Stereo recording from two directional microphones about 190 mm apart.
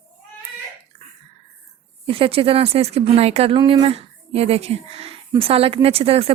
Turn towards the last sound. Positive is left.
turn(degrees=-30)  # may be behind; listen again after turning